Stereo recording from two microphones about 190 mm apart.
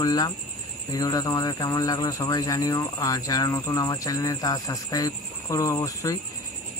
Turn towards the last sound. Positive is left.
turn(degrees=15)  # may be behind; listen again after turning